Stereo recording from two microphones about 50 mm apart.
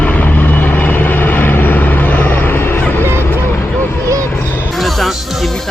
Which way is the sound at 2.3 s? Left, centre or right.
Left.